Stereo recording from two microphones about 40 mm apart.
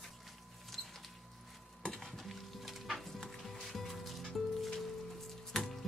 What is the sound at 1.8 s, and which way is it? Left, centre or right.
Stir, centre.